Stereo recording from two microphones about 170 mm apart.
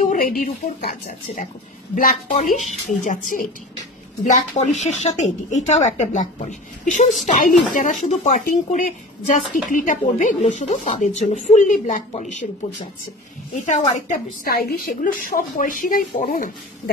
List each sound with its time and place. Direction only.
0.0 s a woman's voice: 55° left (ahead or behind)
13.7 s a woman's voice: 45° left (ahead or behind)